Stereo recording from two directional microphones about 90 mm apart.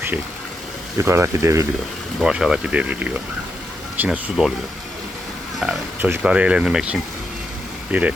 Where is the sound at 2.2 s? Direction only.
5° right (ahead or behind).